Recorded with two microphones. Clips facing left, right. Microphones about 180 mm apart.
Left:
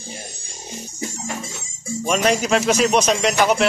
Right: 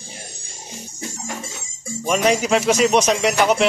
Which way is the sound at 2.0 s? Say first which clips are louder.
Right 1 dB; 15° right (ahead or behind).